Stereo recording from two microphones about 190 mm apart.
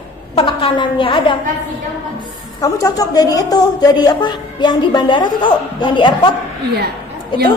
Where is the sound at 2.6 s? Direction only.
20° left (ahead or behind).